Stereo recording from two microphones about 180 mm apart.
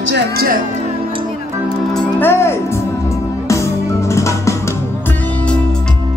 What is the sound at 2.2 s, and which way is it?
Music, 15° left (ahead or behind).